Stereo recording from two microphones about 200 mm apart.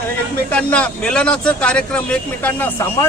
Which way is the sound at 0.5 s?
5° left (ahead or behind).